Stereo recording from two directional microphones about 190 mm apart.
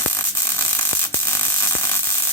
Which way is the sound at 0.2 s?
15° left (ahead or behind).